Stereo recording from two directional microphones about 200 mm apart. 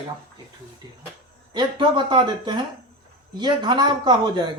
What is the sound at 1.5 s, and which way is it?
Speech, 25° right (ahead or behind).